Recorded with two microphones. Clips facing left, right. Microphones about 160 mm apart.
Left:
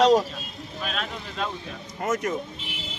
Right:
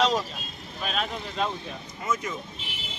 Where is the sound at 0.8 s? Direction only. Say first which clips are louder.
Right 2 dB; centre (ahead or behind).